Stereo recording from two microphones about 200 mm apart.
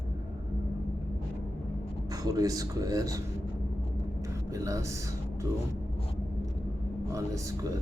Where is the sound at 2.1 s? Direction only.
15° right (ahead or behind).